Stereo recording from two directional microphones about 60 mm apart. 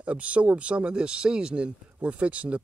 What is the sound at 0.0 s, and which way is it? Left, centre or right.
Speech, right.